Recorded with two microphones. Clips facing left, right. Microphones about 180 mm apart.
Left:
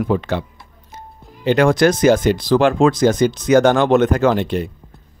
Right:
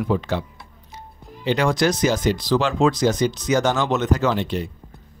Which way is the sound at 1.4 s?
55° left (ahead or behind).